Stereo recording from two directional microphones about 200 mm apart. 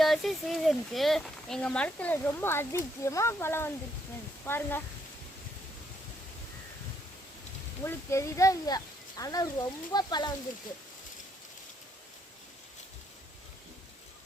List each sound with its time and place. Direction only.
0.0 s speech: centre (ahead or behind)
7.9 s speech: 15° left (ahead or behind)